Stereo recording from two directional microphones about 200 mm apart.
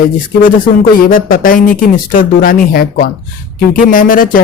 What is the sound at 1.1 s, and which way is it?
Speech, 45° left (ahead or behind).